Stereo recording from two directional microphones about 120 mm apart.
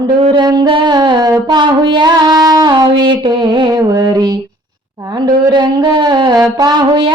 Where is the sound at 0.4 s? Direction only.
35° right (ahead or behind).